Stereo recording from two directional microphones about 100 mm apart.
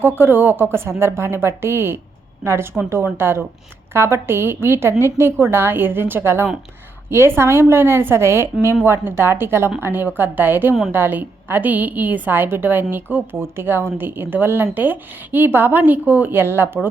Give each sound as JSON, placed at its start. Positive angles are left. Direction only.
{"t": 0.0, "sound": "a woman's voice", "side_deg": -20}